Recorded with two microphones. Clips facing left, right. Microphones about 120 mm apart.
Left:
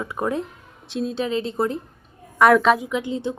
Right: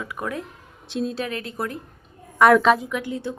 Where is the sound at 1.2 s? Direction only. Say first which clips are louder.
Left 6 dB; 25° left (ahead or behind).